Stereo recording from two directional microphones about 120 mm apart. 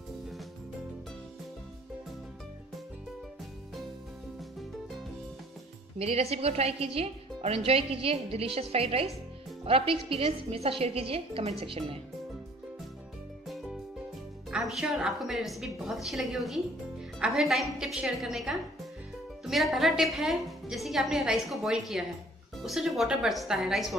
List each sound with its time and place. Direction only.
6.0 s a woman's voice: 60° right (ahead or behind)
13.5 s music: 5° right (ahead or behind)
14.5 s a woman's voice: 5° right (ahead or behind)